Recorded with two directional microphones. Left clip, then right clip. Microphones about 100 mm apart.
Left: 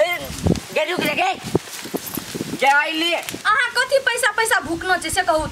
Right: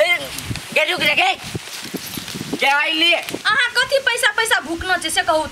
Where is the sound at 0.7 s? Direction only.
20° right (ahead or behind).